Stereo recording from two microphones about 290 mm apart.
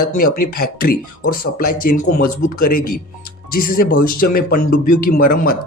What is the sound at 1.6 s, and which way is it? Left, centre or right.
Speech, left.